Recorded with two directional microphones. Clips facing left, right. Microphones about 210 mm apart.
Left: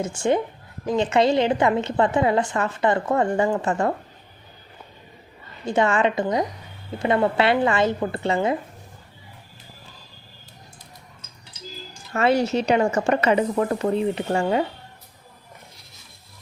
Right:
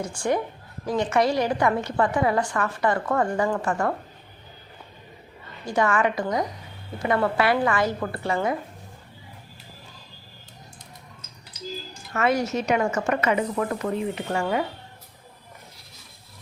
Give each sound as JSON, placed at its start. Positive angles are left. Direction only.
{"t": 0.0, "sound": "a woman's voice", "side_deg": 25}
{"t": 5.6, "sound": "a woman's voice", "side_deg": 25}
{"t": 12.1, "sound": "a woman's voice", "side_deg": 30}